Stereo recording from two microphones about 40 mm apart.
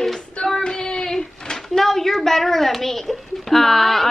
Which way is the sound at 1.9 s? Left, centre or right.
Centre.